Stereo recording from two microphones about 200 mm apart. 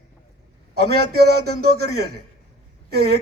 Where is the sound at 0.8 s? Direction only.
50° right (ahead or behind).